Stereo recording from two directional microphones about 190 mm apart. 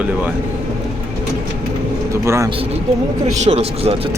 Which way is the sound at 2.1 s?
15° right (ahead or behind).